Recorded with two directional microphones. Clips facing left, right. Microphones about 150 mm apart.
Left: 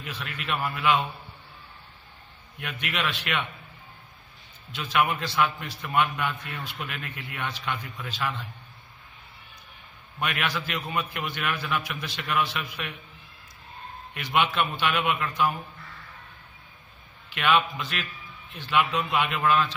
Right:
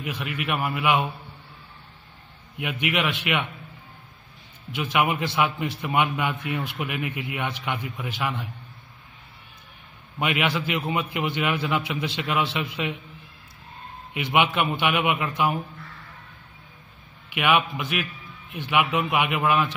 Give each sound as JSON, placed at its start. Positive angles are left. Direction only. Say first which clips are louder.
{"t": 0.0, "sound": "a man's voice", "louder": "right 6 dB", "side_deg": -15}
{"t": 2.5, "sound": "a man's voice", "louder": "right 7 dB", "side_deg": -15}
{"t": 4.9, "sound": "a man's voice", "louder": "right 1 dB", "side_deg": -15}
{"t": 10.1, "sound": "a man's voice", "louder": "right 5 dB", "side_deg": -15}
{"t": 14.1, "sound": "a man's voice", "louder": "right 3 dB", "side_deg": -15}
{"t": 17.3, "sound": "a man's voice", "louder": "right 2 dB", "side_deg": -15}